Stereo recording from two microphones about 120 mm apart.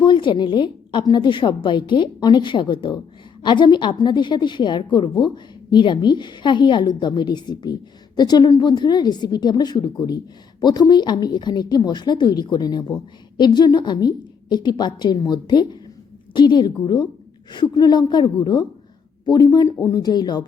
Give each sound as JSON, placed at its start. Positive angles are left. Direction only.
{"t": 0.0, "sound": "a woman's voice", "side_deg": 40}